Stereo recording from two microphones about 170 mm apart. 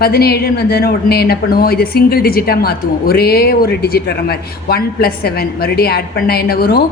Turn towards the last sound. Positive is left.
turn(degrees=65)  # may be behind; listen again after turning